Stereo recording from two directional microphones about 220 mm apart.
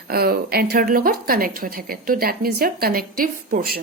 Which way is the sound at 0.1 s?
45° right (ahead or behind).